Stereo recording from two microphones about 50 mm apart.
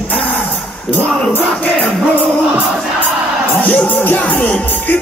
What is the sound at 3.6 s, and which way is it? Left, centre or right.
Music, left.